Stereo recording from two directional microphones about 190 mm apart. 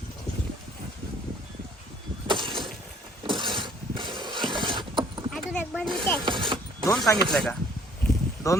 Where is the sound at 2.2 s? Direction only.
25° right (ahead or behind).